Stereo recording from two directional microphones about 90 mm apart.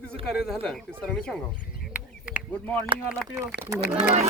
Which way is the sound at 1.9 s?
15° right (ahead or behind).